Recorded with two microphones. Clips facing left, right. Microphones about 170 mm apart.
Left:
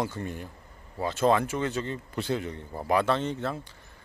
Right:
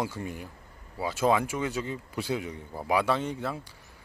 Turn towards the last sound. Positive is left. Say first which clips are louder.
# left 1 dB
turn(degrees=-10)  # may be behind; listen again after turning